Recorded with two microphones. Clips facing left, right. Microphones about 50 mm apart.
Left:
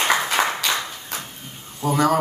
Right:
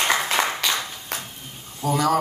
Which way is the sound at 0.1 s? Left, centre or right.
Centre.